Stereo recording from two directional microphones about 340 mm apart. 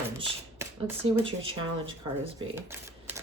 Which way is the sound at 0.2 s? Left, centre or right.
Centre.